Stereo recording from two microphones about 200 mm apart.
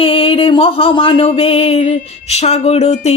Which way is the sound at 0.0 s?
25° left (ahead or behind).